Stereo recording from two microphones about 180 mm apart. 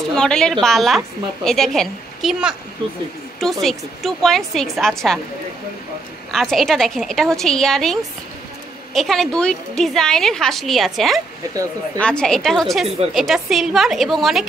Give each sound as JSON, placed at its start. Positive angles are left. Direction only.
{"t": 0.1, "sound": "a woman's voice", "side_deg": 5}
{"t": 6.3, "sound": "a woman's voice", "side_deg": 0}
{"t": 11.5, "sound": "speech", "side_deg": -20}
{"t": 12.0, "sound": "a woman's voice", "side_deg": 5}